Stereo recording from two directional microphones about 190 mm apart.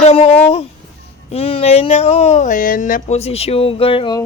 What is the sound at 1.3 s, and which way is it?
Speech, 30° left (ahead or behind).